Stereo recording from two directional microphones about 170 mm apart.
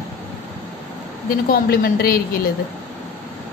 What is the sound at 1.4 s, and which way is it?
A woman's voice, 65° left (ahead or behind).